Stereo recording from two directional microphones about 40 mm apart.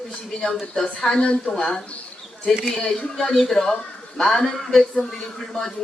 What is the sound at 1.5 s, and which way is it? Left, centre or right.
Speech, centre.